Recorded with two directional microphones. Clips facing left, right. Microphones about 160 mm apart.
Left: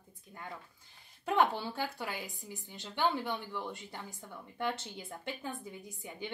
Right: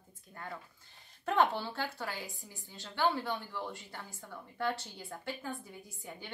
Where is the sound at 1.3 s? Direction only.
15° left (ahead or behind).